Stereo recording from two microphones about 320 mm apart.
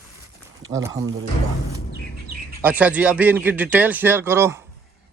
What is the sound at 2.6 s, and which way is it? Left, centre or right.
A man's voice, centre.